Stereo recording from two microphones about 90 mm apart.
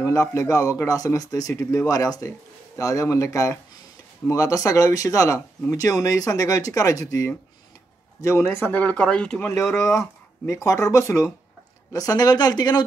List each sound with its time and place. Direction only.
0.0 s speech: 35° left (ahead or behind)
8.7 s speech: 15° left (ahead or behind)
9.4 s speech: 30° left (ahead or behind); by 12.8 s 50° left (ahead or behind)